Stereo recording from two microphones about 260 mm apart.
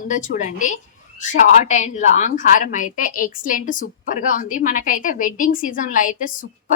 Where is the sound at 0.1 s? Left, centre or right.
Left.